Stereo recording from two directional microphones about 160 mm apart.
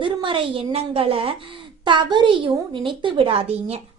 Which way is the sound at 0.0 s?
30° right (ahead or behind).